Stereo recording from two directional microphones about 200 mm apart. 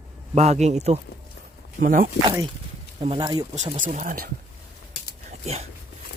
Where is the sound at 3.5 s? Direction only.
35° right (ahead or behind).